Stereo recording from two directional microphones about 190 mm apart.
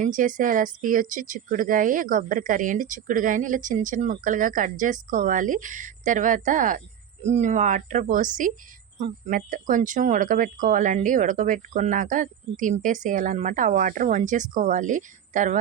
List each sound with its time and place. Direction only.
0.0 s speech: 45° right (ahead or behind)